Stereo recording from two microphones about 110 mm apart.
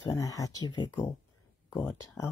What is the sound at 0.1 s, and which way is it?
Speech, 30° left (ahead or behind).